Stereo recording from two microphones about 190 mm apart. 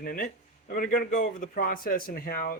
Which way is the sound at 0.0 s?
50° left (ahead or behind).